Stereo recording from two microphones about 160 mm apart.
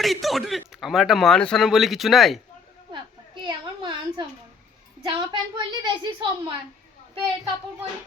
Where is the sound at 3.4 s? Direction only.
30° right (ahead or behind).